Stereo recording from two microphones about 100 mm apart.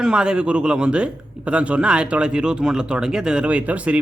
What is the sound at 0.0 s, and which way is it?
A man's voice, 10° right (ahead or behind).